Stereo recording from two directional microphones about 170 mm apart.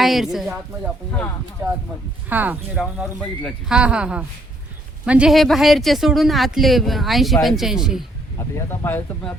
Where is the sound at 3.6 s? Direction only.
5° right (ahead or behind).